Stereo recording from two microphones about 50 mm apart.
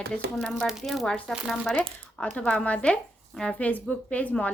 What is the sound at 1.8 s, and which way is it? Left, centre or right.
Speech, left.